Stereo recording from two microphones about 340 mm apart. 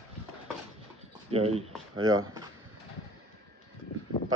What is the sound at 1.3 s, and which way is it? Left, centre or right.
Speech, centre.